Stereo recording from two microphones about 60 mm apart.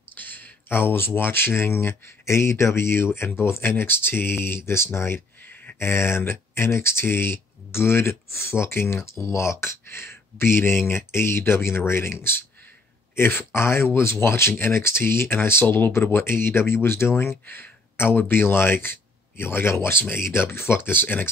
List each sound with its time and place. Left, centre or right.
0.1 s speech: left
15.6 s speech: left
15.9 s speech: left